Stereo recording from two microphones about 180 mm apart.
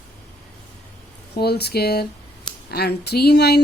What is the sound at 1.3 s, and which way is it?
A woman's voice, 65° left (ahead or behind).